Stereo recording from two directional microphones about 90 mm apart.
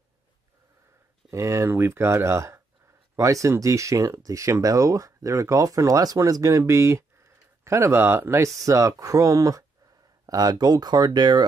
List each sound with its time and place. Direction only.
1.3 s speech: 35° right (ahead or behind); by 11.4 s 55° right (ahead or behind)